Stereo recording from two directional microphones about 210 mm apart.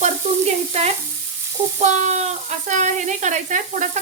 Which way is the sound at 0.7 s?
30° right (ahead or behind).